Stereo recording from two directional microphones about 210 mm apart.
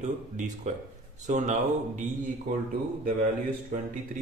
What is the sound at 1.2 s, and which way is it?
Speech, 35° right (ahead or behind).